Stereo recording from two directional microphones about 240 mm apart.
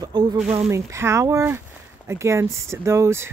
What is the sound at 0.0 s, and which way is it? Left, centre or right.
Speech, centre.